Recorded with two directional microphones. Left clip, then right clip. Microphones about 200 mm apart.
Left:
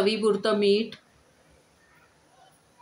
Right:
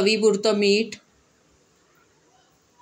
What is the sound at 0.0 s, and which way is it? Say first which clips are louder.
Speech: right 4 dB; 15° right (ahead or behind).